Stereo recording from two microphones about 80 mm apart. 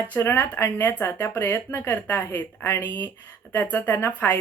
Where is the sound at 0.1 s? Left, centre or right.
Left.